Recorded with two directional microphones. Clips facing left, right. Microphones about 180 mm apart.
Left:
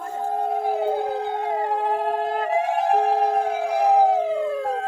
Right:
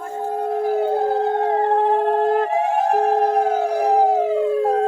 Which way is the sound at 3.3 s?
40° right (ahead or behind).